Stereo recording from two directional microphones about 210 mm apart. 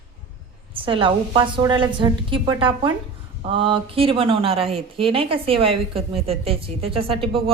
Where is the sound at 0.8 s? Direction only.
25° right (ahead or behind).